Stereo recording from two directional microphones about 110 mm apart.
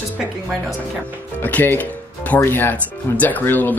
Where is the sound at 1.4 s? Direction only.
15° left (ahead or behind).